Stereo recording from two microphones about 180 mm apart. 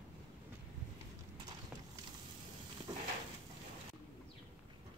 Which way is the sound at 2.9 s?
25° right (ahead or behind).